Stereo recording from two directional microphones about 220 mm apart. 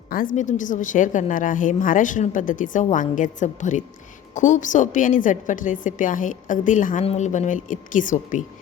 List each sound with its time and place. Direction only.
0.1 s a woman's voice: 40° left (ahead or behind)